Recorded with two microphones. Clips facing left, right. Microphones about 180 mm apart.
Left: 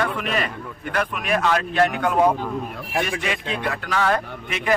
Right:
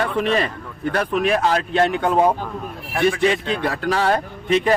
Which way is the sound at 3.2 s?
35° right (ahead or behind).